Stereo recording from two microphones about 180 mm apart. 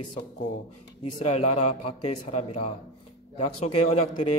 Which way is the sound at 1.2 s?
40° left (ahead or behind).